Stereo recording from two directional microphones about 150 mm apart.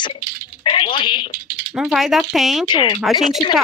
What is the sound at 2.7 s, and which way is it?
Speech, 30° left (ahead or behind).